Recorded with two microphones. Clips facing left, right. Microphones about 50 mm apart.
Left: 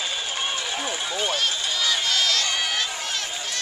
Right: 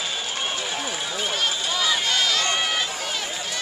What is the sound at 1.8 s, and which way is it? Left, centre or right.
Run, centre.